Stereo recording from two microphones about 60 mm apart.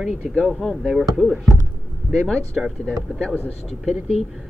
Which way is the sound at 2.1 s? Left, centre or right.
Centre.